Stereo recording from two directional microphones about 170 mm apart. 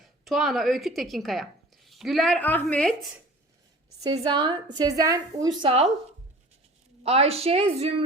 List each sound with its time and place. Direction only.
0.0 s speech: centre (ahead or behind)
4.2 s a woman's voice: 25° right (ahead or behind)
5.6 s a woman's voice: 35° right (ahead or behind)
7.0 s a woman's voice: 35° right (ahead or behind)